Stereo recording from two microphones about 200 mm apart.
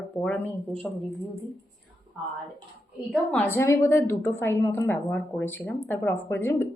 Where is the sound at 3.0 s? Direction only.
5° left (ahead or behind).